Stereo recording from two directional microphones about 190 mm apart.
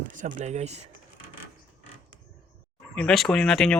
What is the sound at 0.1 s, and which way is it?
Speech, 40° right (ahead or behind).